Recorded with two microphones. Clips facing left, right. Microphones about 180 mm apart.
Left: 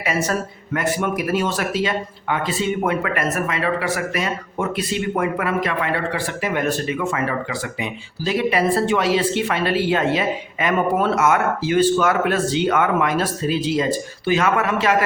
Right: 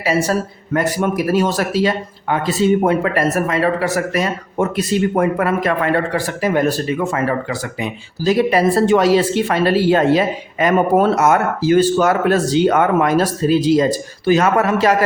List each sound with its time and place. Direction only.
0.0 s speech: 30° right (ahead or behind)